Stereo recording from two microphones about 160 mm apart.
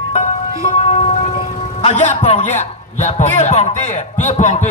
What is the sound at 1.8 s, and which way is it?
A man's voice, 40° left (ahead or behind).